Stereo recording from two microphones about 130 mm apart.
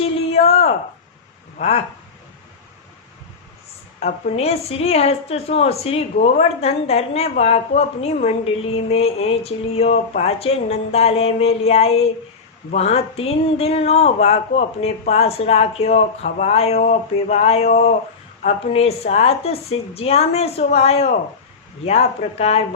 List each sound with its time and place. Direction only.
0.0 s a sound: 50° left (ahead or behind)
1.6 s a woman's voice: 55° left (ahead or behind)
4.0 s a woman's voice: 50° left (ahead or behind)